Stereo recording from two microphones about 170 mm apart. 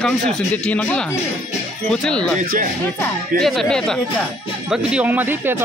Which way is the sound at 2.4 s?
55° right (ahead or behind).